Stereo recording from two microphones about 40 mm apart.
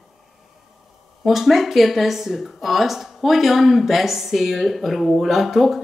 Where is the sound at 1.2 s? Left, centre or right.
Centre.